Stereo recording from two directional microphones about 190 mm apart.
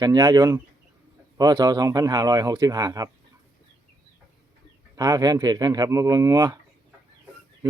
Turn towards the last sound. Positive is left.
turn(degrees=-20)  # may be behind; listen again after turning